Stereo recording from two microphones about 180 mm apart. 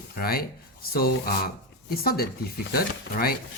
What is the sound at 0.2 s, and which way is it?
Speech, 55° left (ahead or behind).